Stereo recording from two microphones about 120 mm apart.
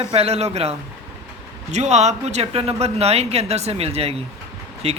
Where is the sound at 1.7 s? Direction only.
70° right (ahead or behind).